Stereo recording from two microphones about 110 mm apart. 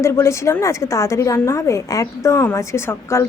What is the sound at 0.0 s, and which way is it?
A woman's voice, 25° left (ahead or behind).